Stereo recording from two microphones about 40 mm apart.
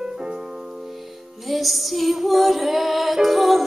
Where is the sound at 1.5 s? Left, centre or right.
Centre.